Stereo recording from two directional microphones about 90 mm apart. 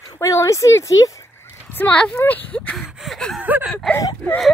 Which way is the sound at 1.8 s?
15° left (ahead or behind).